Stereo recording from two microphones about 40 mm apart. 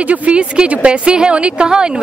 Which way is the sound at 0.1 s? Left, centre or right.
Right.